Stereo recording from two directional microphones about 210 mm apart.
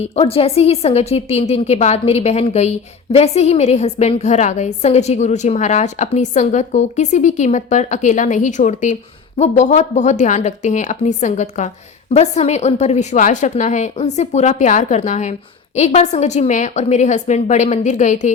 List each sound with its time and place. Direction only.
0.0 s a woman's voice: 30° left (ahead or behind)